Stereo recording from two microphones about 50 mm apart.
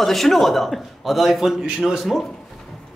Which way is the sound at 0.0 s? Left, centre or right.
Centre.